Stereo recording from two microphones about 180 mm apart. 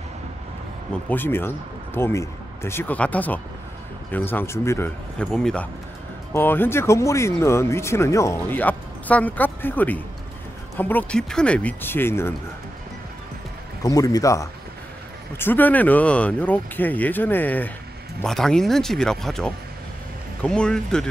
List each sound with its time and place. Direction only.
1.0 s speech: 10° left (ahead or behind)
5.2 s speech: 5° left (ahead or behind)
13.8 s speech: 20° left (ahead or behind)